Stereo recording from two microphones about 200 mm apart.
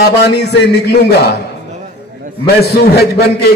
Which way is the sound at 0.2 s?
55° left (ahead or behind).